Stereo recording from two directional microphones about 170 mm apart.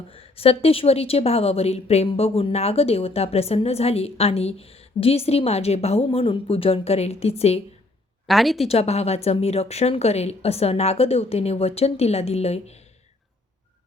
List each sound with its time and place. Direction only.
0.1 s a woman's voice: 35° left (ahead or behind)
8.3 s a woman's voice: centre (ahead or behind)
8.6 s a woman's voice: 35° left (ahead or behind)